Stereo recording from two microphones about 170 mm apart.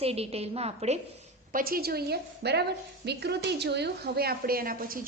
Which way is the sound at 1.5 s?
60° right (ahead or behind).